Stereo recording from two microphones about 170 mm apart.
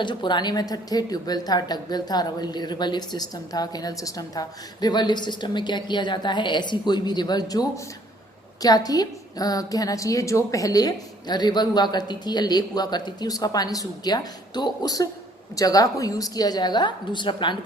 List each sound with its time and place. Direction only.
0.0 s a woman's voice: 30° left (ahead or behind)